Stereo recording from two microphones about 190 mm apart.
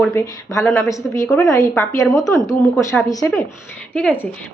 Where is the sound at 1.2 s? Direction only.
Centre (ahead or behind).